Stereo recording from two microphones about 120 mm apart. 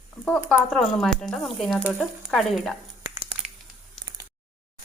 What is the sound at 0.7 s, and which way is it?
Speech, 5° left (ahead or behind).